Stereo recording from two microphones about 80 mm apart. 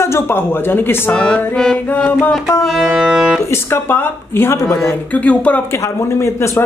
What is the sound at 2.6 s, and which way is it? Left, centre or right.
Music, centre.